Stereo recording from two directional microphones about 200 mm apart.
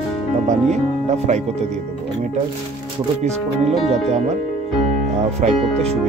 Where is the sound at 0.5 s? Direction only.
35° right (ahead or behind).